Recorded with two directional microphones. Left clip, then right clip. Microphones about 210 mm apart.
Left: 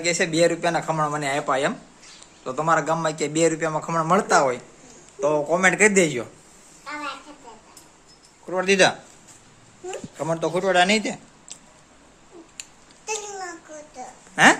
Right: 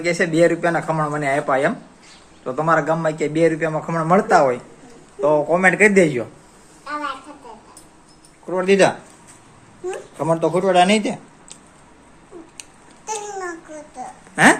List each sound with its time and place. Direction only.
0.0 s a man's voice: 10° left (ahead or behind)
8.4 s a man's voice: 10° left (ahead or behind)
13.1 s babbling: 15° left (ahead or behind)
14.3 s speech: centre (ahead or behind)